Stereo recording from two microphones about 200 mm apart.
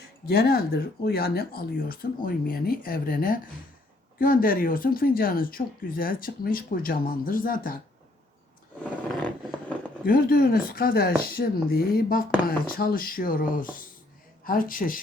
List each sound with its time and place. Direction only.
0.3 s speech: 50° left (ahead or behind)
8.8 s roar: 5° left (ahead or behind)
10.0 s speech: 45° left (ahead or behind)